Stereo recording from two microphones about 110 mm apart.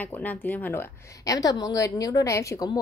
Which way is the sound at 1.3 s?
35° left (ahead or behind).